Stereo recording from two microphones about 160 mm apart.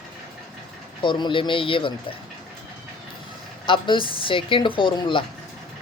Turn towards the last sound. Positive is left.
turn(degrees=30)  # may be behind; listen again after turning